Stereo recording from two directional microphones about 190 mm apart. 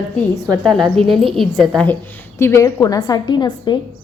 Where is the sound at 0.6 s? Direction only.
Centre (ahead or behind).